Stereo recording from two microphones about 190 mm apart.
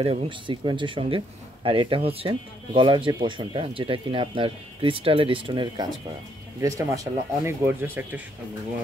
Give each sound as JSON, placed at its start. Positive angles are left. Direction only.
{"t": 0.0, "sound": "speech", "side_deg": -30}